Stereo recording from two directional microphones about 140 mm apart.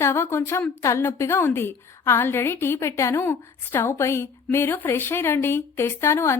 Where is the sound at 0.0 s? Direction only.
20° left (ahead or behind).